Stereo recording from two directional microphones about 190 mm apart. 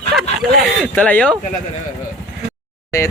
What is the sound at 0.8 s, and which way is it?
Speech, 10° left (ahead or behind).